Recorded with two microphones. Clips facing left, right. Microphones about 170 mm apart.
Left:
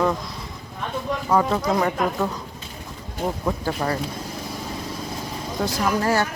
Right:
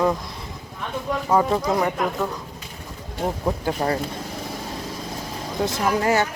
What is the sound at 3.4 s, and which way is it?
Speech, 25° right (ahead or behind).